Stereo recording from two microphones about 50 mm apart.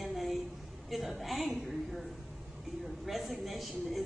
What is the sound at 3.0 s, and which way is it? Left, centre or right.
A woman's voice, centre.